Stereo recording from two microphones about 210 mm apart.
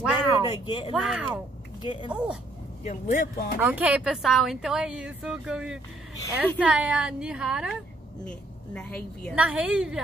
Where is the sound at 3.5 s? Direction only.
10° right (ahead or behind).